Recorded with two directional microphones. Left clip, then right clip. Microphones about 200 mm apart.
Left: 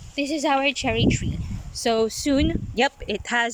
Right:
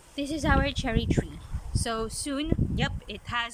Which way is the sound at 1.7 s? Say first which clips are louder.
Left 10 dB; 20° left (ahead or behind).